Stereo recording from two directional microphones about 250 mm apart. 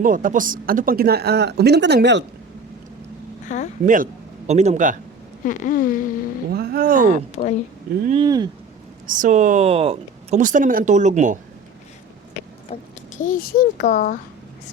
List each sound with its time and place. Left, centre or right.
0.0 s speech: right
3.5 s speech: left
3.8 s a man's voice: right
5.5 s speech: left
6.5 s speech: right
7.4 s speech: left
8.0 s speech: right
9.0 s speech: right
12.7 s speech: left